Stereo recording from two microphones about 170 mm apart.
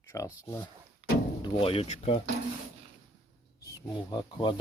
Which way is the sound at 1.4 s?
35° left (ahead or behind).